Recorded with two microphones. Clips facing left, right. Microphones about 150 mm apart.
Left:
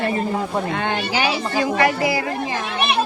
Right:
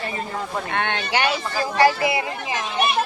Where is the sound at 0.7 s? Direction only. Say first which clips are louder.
Left 1 dB; 65° right (ahead or behind).